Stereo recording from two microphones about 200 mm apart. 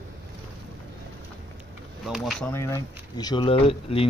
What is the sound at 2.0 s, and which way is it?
Speech, centre (ahead or behind).